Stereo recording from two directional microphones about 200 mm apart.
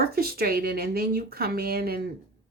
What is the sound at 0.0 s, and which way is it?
A woman's voice, 50° right (ahead or behind).